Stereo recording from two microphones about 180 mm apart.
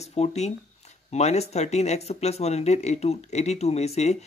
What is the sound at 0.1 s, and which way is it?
Speech, 35° left (ahead or behind).